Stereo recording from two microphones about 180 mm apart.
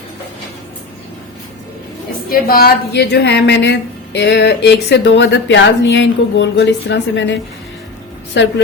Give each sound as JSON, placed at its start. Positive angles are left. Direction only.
{"t": 2.3, "sound": "a woman's voice", "side_deg": 55}
{"t": 8.4, "sound": "a woman's voice", "side_deg": 90}